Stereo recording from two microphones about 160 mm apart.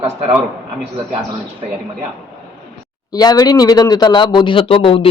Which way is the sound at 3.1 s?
25° left (ahead or behind).